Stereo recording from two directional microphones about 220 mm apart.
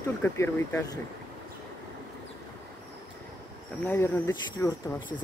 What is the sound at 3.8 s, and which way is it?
Speech, 10° left (ahead or behind).